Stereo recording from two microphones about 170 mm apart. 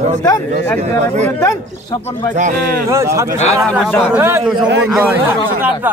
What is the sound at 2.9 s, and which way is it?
Speech, 15° right (ahead or behind).